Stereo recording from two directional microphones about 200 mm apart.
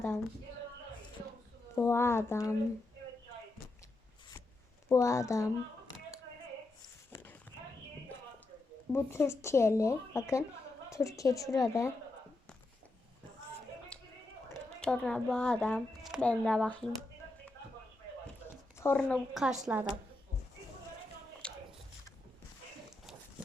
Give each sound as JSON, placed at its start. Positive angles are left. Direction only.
{"t": 1.7, "sound": "speech", "side_deg": 10}
{"t": 4.9, "sound": "speech", "side_deg": 15}
{"t": 7.1, "sound": "clip-clop", "side_deg": 10}
{"t": 8.9, "sound": "speech", "side_deg": 10}
{"t": 14.8, "sound": "speech", "side_deg": 5}
{"t": 18.8, "sound": "a woman's voice", "side_deg": 10}
{"t": 21.4, "sound": "a sound", "side_deg": 5}